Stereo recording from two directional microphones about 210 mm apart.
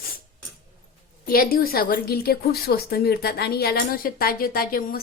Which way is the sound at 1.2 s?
45° left (ahead or behind).